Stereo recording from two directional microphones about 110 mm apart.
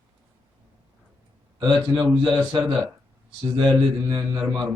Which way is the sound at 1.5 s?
45° right (ahead or behind).